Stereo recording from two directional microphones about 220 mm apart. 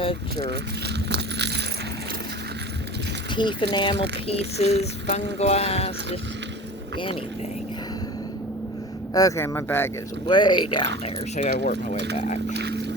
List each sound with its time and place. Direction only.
0.0 s speech: 25° left (ahead or behind)
1.1 s coin: 50° right (ahead or behind)
3.3 s a sound: 20° left (ahead or behind)
9.1 s speech: 15° left (ahead or behind)
10.2 s a sound: 20° left (ahead or behind)
11.0 s speech: 30° left (ahead or behind)
12.5 s speech: 50° right (ahead or behind)